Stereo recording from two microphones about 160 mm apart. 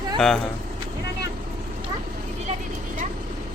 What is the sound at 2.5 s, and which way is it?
Vehicle, 40° right (ahead or behind).